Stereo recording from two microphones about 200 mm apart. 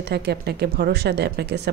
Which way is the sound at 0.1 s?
55° right (ahead or behind).